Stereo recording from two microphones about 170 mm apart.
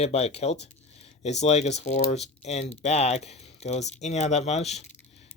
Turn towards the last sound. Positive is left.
turn(degrees=40)  # may be behind; listen again after turning